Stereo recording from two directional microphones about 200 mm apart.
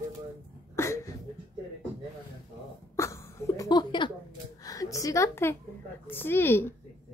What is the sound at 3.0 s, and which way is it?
Sneeze, 15° left (ahead or behind).